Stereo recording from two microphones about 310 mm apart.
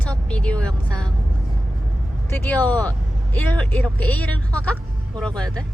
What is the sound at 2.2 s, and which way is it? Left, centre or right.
Speech, centre.